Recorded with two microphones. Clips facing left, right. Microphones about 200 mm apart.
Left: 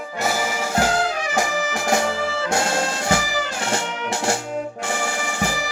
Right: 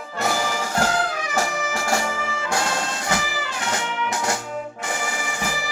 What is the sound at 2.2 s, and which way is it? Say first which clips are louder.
Music: left 5 dB; 40° left (ahead or behind).